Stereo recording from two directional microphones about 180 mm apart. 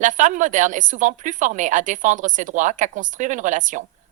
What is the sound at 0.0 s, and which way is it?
A woman's voice, 45° right (ahead or behind).